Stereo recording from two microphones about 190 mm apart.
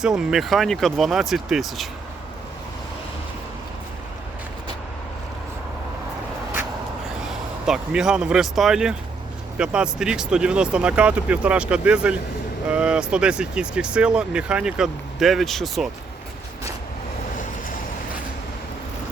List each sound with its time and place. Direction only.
0.0 s speech: 5° right (ahead or behind)
7.3 s speech: 5° right (ahead or behind)
17.3 s vehicle: 45° left (ahead or behind)